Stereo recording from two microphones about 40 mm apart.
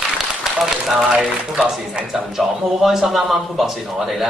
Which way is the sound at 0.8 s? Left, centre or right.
Centre.